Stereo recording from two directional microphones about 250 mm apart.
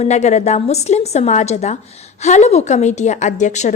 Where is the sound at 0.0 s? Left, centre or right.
Left.